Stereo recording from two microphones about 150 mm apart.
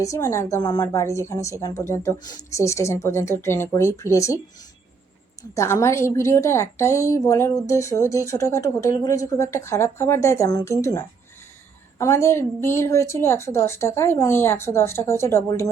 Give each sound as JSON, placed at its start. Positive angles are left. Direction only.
{"t": 0.0, "sound": "a woman's voice", "side_deg": 20}
{"t": 5.4, "sound": "a woman's voice", "side_deg": 20}